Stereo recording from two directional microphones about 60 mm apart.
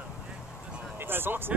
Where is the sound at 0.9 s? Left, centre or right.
Right.